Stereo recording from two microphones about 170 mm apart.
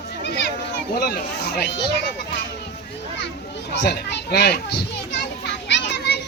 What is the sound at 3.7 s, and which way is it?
A child's voice, 85° left.